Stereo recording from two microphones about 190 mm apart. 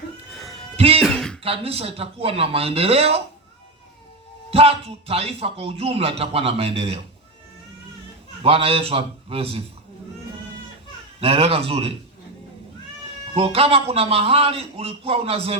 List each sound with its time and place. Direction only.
0.3 s a sound: centre (ahead or behind)
0.8 s music: 30° right (ahead or behind)
1.0 s music: centre (ahead or behind)
1.4 s a man's voice: 30° right (ahead or behind)
4.5 s a man's voice: 30° right (ahead or behind)
8.4 s a man's voice: 30° right (ahead or behind)
11.2 s a man's voice: 30° right (ahead or behind)
13.3 s a man's voice: 30° right (ahead or behind)